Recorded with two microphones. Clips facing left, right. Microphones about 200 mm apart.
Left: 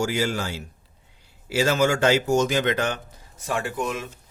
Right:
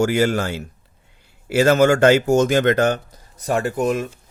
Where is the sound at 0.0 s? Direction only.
55° right (ahead or behind).